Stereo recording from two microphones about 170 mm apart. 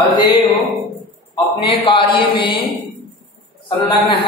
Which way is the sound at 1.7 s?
30° left (ahead or behind).